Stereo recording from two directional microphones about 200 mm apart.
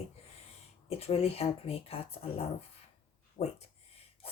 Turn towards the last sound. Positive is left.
turn(degrees=35)  # may be behind; listen again after turning